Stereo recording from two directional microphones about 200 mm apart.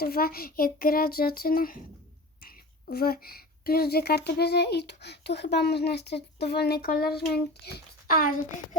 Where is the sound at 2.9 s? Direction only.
50° left (ahead or behind).